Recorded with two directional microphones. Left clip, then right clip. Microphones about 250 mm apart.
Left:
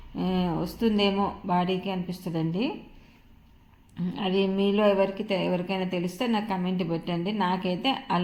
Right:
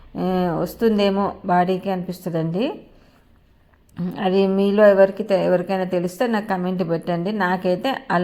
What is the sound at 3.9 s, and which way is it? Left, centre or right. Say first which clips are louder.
A woman's voice: right 7 dB; right.